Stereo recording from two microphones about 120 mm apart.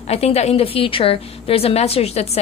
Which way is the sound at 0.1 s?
65° left (ahead or behind).